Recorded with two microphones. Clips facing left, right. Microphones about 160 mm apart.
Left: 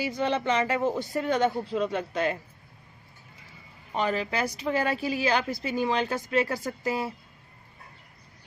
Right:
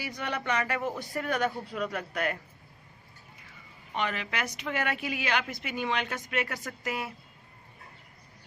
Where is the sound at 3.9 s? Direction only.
35° left (ahead or behind).